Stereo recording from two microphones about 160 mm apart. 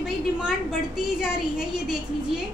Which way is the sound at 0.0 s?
Centre (ahead or behind).